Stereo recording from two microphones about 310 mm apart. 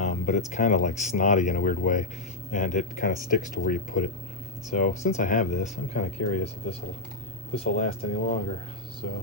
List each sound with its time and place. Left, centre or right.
0.0 s music: left
0.5 s speech: left